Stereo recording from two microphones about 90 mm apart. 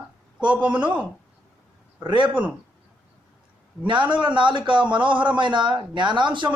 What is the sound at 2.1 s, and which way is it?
Speech, 65° right (ahead or behind).